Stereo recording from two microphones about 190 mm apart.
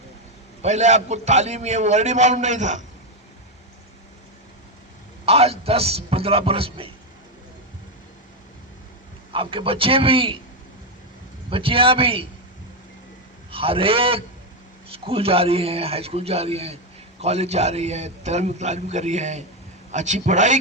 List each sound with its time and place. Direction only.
0.6 s a man's voice: 35° right (ahead or behind)
5.2 s a man's voice: 30° right (ahead or behind)
9.3 s a man's voice: 30° right (ahead or behind)
11.5 s a man's voice: 30° right (ahead or behind)
13.5 s a man's voice: 30° right (ahead or behind)